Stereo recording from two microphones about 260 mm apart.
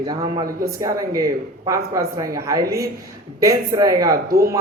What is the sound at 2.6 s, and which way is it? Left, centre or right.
Speech, right.